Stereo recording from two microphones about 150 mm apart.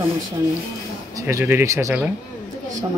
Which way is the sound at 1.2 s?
15° right (ahead or behind).